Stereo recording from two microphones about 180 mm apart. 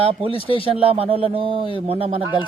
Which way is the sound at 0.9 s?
30° right (ahead or behind).